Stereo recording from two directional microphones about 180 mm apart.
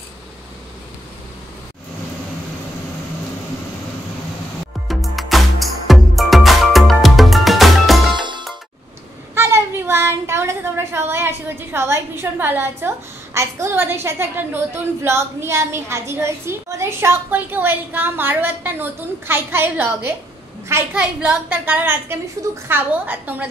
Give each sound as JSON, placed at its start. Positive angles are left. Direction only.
{"t": 4.8, "sound": "music", "side_deg": 0}
{"t": 8.2, "sound": "music", "side_deg": -25}
{"t": 9.3, "sound": "a child's voice", "side_deg": -15}